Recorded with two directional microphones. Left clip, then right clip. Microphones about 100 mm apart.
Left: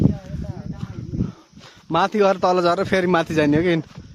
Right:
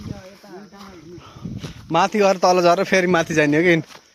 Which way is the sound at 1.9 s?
50° left (ahead or behind).